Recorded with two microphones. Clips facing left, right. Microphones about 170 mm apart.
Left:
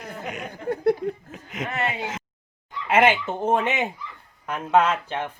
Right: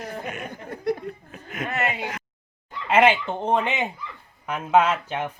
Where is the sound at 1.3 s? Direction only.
20° left (ahead or behind).